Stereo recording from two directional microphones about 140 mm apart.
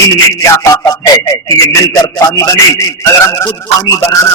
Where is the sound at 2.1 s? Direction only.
20° left (ahead or behind).